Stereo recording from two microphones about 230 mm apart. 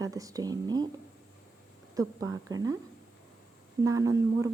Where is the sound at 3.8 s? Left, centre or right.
Centre.